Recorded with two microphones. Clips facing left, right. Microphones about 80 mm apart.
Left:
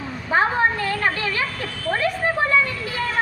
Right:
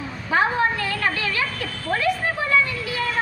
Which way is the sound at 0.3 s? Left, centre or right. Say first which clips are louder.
Left 1 dB; left.